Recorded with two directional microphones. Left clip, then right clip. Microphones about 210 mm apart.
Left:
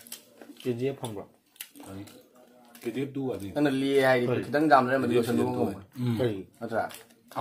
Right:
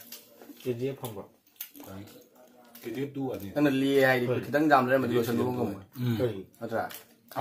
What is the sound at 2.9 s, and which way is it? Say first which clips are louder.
Speech: left 1 dB; 55° left (ahead or behind).